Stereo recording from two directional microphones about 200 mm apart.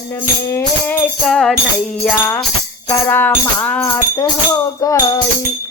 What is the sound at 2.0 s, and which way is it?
Speech, 10° left (ahead or behind).